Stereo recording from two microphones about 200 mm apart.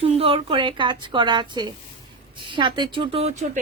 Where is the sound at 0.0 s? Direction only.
30° right (ahead or behind).